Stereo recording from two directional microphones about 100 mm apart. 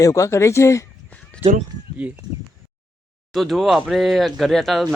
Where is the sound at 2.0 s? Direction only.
10° right (ahead or behind).